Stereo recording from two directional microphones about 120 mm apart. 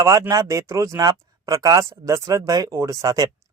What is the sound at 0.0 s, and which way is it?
A man's voice, 30° right (ahead or behind).